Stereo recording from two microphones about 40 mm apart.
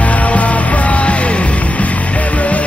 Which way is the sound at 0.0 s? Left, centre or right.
Left.